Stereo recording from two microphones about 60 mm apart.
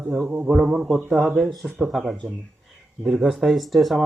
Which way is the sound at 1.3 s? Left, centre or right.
Centre.